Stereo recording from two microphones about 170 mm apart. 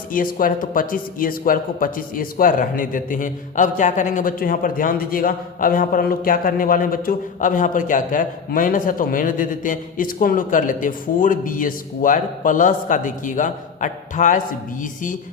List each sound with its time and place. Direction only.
0.1 s a man's voice: 55° left (ahead or behind)